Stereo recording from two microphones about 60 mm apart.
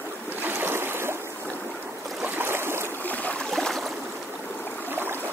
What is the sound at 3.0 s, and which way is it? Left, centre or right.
Stream, left.